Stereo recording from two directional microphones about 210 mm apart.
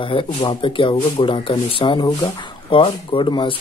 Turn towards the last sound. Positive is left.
turn(degrees=25)  # may be behind; listen again after turning